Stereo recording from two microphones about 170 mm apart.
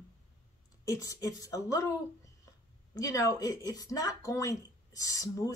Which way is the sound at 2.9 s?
20° left (ahead or behind).